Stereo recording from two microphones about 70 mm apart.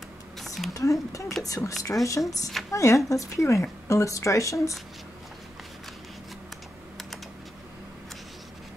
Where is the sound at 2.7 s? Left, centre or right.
Left.